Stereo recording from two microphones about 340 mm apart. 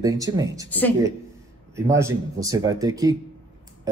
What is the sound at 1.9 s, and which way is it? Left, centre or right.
Speech, centre.